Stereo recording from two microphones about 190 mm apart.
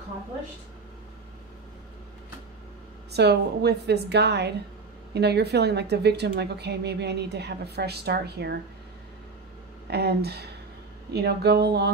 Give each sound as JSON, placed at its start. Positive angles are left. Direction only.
{"t": 3.1, "sound": "a woman's voice", "side_deg": -60}
{"t": 9.8, "sound": "a woman's voice", "side_deg": -60}